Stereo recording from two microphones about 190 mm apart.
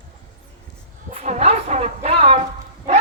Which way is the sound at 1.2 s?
35° right (ahead or behind).